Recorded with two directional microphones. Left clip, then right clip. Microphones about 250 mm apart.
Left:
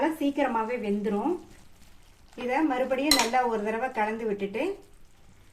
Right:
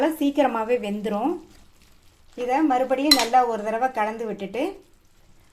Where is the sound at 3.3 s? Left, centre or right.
Right.